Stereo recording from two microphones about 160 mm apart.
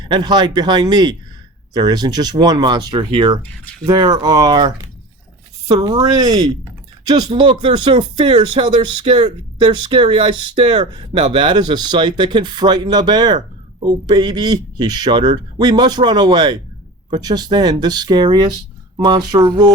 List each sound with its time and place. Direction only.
0.0 s speech: 25° right (ahead or behind)